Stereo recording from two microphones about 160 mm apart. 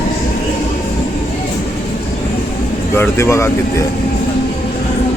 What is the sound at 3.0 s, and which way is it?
Speech, 15° left (ahead or behind).